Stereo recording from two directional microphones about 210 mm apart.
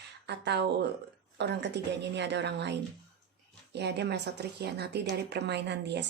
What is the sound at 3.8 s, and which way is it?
Speech, 50° right (ahead or behind).